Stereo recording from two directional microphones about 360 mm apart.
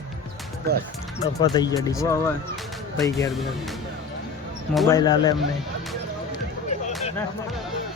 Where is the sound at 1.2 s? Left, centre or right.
Centre.